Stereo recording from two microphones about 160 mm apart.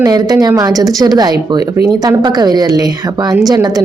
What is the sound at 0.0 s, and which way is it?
A woman's voice, 25° right (ahead or behind).